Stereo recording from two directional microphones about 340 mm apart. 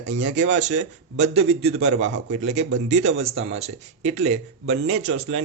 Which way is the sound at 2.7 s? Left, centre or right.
Right.